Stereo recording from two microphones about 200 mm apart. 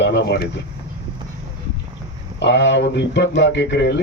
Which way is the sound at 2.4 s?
60° left (ahead or behind).